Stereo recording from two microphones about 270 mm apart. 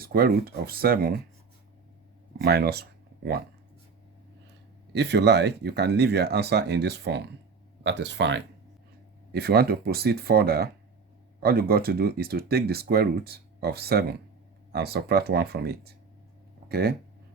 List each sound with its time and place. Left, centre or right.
0.0 s speech: right
2.4 s speech: right
4.9 s speech: right